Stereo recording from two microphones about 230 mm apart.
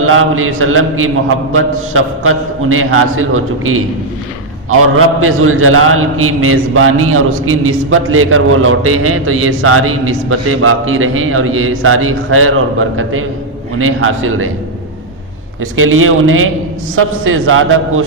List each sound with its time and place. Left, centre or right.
0.0 s a man's voice: right
4.9 s a man's voice: right
15.7 s a man's voice: right